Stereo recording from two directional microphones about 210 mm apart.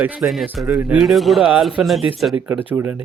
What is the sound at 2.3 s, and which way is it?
Speech, 10° right (ahead or behind).